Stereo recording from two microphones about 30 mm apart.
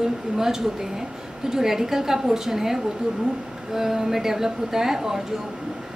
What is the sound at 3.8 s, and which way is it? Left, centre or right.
A woman's voice, centre.